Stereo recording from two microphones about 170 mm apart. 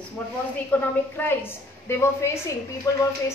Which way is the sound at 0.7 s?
10° left (ahead or behind).